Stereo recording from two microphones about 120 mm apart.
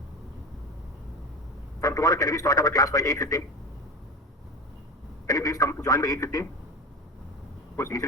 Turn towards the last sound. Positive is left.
turn(degrees=25)  # may be behind; listen again after turning